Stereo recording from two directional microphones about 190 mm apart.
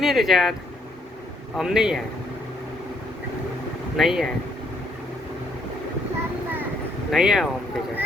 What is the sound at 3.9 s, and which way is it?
Speech, centre (ahead or behind).